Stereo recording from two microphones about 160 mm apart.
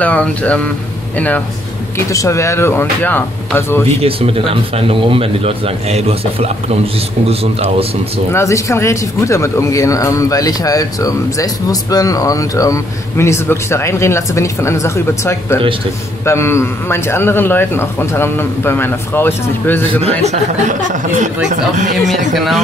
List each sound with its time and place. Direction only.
0.0 s a man's voice: 10° left (ahead or behind)
4.0 s speech: 35° right (ahead or behind)
8.3 s a man's voice: 15° left (ahead or behind)
19.9 s speech: 40° right (ahead or behind)
22.3 s speech: centre (ahead or behind)